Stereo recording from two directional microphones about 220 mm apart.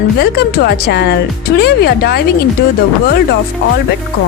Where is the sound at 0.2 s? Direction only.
45° left (ahead or behind).